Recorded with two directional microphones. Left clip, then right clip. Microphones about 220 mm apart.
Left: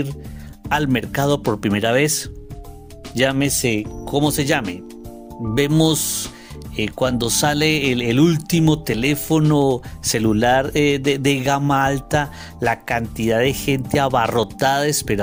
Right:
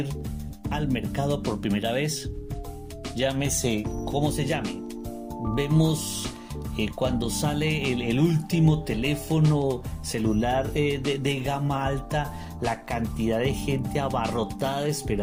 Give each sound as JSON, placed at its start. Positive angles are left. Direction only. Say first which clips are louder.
{"t": 0.7, "sound": "speech", "louder": "left 10 dB", "side_deg": 55}
{"t": 3.2, "sound": "speech", "louder": "left 8 dB", "side_deg": 50}